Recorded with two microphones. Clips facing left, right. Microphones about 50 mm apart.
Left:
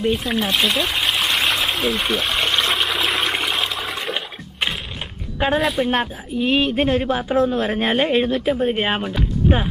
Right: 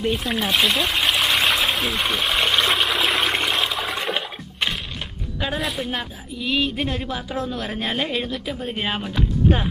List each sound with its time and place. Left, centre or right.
0.0 s trickle: centre
5.6 s a man's voice: centre
5.9 s a woman's voice: left